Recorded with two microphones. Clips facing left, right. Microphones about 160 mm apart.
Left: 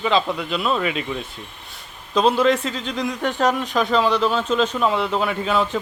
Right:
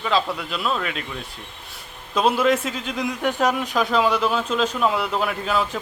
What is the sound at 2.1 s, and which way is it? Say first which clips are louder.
A man's voice: left 2 dB; 5° right (ahead or behind).